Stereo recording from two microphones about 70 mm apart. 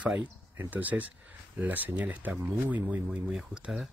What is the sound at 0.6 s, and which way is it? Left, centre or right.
Speech, right.